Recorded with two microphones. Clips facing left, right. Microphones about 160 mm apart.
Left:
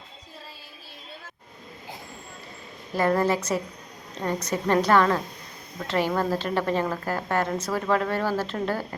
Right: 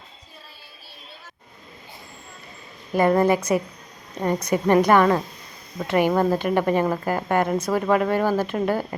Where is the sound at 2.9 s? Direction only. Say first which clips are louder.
Right 4 dB; 15° right (ahead or behind).